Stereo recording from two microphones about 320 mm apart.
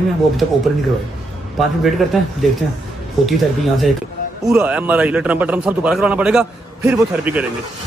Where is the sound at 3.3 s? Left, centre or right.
Centre.